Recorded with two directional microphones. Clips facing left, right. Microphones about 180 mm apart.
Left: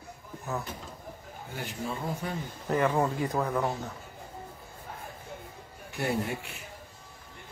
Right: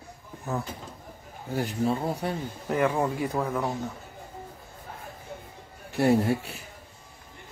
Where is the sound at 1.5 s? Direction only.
35° right (ahead or behind).